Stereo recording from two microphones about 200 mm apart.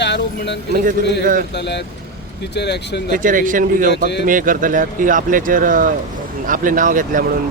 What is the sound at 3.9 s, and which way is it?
Speech, 60° left (ahead or behind).